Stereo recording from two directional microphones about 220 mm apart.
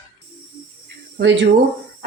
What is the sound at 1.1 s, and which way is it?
Speech, 55° right (ahead or behind).